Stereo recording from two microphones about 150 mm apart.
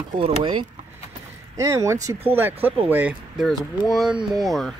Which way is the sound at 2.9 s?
10° right (ahead or behind).